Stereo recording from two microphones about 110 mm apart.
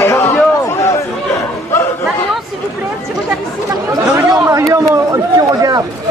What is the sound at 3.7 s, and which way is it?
Speech, 30° right (ahead or behind).